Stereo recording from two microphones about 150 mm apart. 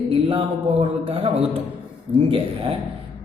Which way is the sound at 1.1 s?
40° right (ahead or behind).